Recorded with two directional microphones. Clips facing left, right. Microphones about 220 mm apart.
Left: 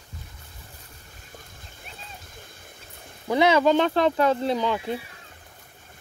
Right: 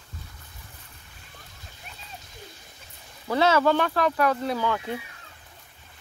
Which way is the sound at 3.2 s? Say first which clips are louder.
Left 2 dB; 15° left (ahead or behind).